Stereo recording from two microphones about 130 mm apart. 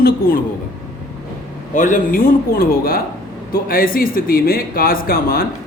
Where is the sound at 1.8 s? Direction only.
85° left.